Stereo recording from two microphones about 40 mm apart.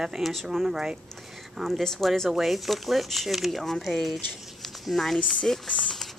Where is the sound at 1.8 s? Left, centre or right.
Centre.